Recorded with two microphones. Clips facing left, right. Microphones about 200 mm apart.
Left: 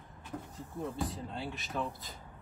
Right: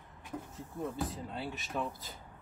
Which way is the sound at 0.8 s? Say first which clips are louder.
Even; centre (ahead or behind).